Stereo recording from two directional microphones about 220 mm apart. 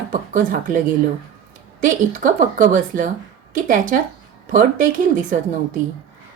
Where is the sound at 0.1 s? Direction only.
40° right (ahead or behind).